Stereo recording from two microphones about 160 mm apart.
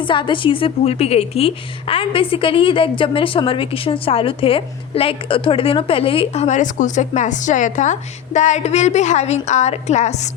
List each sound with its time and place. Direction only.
0.0 s a woman's voice: 30° left (ahead or behind)